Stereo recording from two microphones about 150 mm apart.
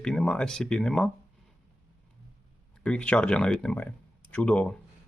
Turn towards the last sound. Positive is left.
turn(degrees=5)  # may be behind; listen again after turning